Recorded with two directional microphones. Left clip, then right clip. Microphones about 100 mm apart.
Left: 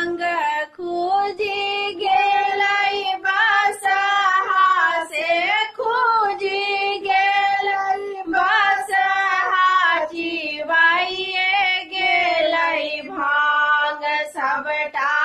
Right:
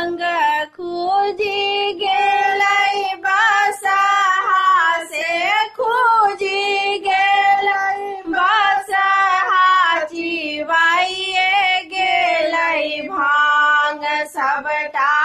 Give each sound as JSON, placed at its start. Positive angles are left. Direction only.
{"t": 0.0, "sound": "music", "side_deg": -25}
{"t": 2.2, "sound": "child singing", "side_deg": -30}
{"t": 2.5, "sound": "child singing", "side_deg": -45}
{"t": 7.6, "sound": "child singing", "side_deg": -20}
{"t": 14.7, "sound": "female singing", "side_deg": -45}